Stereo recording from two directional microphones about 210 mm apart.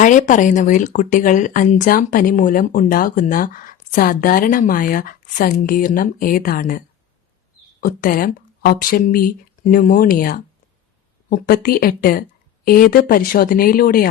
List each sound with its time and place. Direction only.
0.0 s speech: 35° left (ahead or behind)